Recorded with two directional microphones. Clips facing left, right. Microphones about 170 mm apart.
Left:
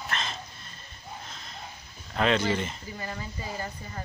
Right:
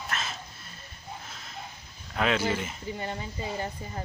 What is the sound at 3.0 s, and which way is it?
Speech, 20° right (ahead or behind).